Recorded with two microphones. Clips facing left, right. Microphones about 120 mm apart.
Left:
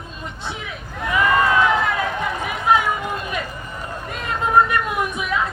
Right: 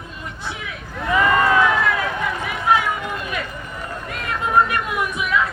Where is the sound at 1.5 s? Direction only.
25° left (ahead or behind).